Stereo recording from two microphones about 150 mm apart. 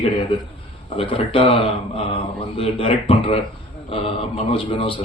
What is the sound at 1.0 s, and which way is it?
A man's voice, 35° left (ahead or behind).